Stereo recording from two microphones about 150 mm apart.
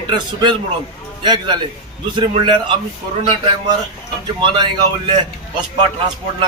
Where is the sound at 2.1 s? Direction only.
35° right (ahead or behind).